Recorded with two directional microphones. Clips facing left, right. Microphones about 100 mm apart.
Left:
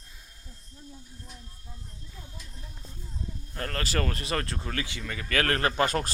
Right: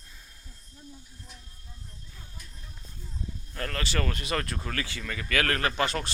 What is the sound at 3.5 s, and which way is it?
Speech, 35° left (ahead or behind).